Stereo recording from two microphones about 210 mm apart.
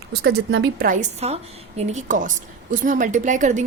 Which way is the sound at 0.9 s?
35° right (ahead or behind).